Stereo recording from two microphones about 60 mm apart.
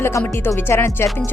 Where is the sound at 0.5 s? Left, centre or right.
Left.